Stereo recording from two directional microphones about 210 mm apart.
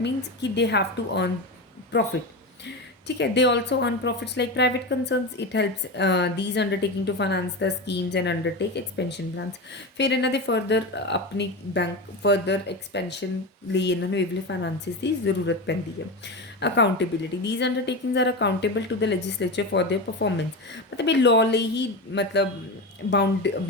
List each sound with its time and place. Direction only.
0.0 s speech: 55° left (ahead or behind)
3.2 s speech: 55° left (ahead or behind)